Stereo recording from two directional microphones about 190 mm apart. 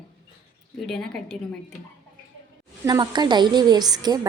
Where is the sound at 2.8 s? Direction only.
20° right (ahead or behind).